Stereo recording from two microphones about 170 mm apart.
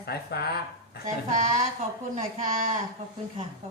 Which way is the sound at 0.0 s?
65° left (ahead or behind).